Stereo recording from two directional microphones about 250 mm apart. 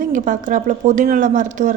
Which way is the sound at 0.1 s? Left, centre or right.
Right.